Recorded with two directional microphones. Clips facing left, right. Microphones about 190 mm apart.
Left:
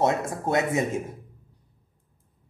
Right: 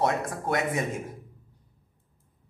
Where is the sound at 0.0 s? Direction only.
25° left (ahead or behind).